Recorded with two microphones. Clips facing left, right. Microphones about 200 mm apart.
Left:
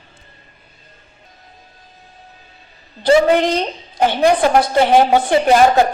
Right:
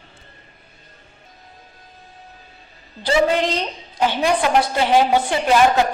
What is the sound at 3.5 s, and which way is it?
A woman's voice, 50° left (ahead or behind).